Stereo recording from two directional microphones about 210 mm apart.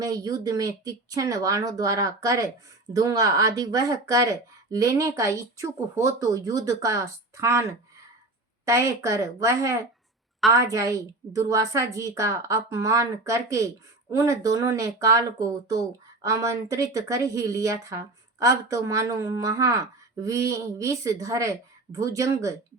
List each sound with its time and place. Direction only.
0.0 s speech: 15° right (ahead or behind)